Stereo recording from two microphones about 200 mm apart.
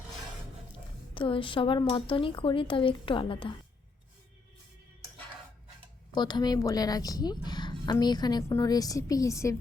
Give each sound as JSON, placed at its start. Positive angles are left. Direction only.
{"t": 1.1, "sound": "a woman's voice", "side_deg": 25}
{"t": 6.1, "sound": "a woman's voice", "side_deg": 20}